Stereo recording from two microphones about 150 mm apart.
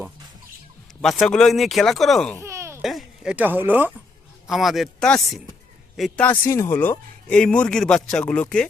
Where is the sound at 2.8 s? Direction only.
Centre (ahead or behind).